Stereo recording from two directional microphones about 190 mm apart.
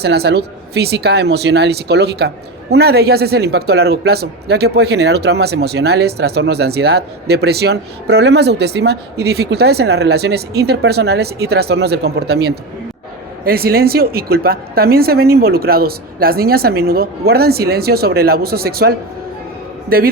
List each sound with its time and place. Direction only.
0.0 s a woman's voice: 60° right (ahead or behind)